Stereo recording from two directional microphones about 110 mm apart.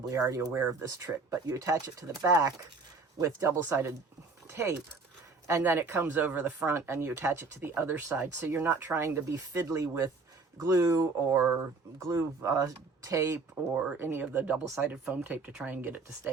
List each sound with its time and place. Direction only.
0.1 s speech: 25° right (ahead or behind)